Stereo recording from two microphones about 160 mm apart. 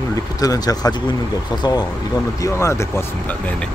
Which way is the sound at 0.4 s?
25° left (ahead or behind).